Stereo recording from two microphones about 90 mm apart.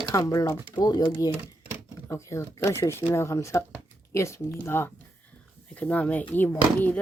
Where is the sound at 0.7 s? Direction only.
50° left (ahead or behind).